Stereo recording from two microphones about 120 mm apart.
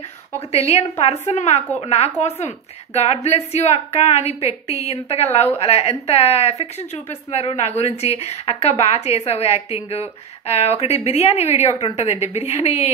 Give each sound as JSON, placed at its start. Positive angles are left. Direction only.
{"t": 0.7, "sound": "a woman's voice", "side_deg": 60}